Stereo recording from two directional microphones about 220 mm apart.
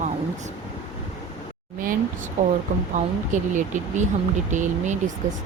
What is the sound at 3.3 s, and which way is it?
Speech, 35° right (ahead or behind).